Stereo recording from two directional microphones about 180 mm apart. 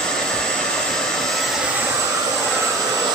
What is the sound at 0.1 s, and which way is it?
Vehicle, 5° left (ahead or behind).